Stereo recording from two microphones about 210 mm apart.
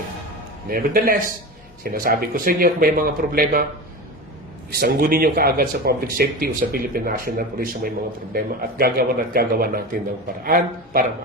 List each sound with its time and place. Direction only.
0.7 s speech: 45° right (ahead or behind)
4.7 s speech: 45° right (ahead or behind)